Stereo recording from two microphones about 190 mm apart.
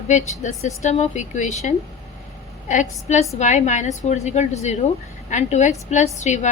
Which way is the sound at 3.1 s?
40° left (ahead or behind).